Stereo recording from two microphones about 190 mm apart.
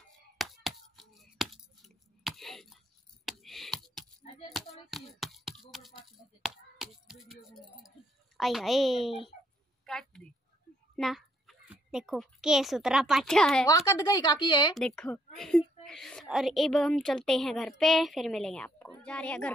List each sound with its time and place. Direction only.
0.4 s scissors: centre (ahead or behind)
3.3 s a sound: centre (ahead or behind)
8.4 s a woman's voice: centre (ahead or behind)
9.8 s a sound: centre (ahead or behind)
11.0 s a child's voice: centre (ahead or behind)
13.7 s speech: 20° left (ahead or behind)
14.8 s a woman's voice: 5° left (ahead or behind)